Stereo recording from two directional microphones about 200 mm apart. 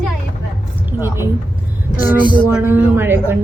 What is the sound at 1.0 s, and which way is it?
Speech, 10° right (ahead or behind).